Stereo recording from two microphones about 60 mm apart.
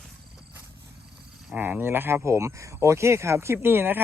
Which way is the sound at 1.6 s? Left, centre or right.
Right.